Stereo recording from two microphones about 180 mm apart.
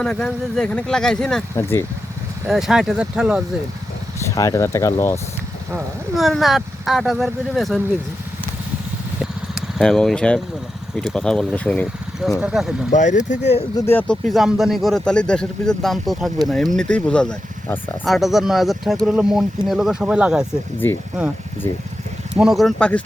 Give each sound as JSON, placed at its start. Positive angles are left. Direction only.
{"t": 0.0, "sound": "speech", "side_deg": 5}
{"t": 2.5, "sound": "speech", "side_deg": 0}
{"t": 4.2, "sound": "speech", "side_deg": 20}
{"t": 6.1, "sound": "speech", "side_deg": 0}
{"t": 9.6, "sound": "speech", "side_deg": 0}
{"t": 12.9, "sound": "speech", "side_deg": 45}
{"t": 13.7, "sound": "speech", "side_deg": 10}
{"t": 20.8, "sound": "speech", "side_deg": 10}
{"t": 22.4, "sound": "speech", "side_deg": 0}